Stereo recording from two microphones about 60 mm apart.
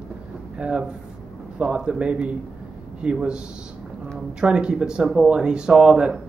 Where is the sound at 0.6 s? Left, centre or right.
Centre.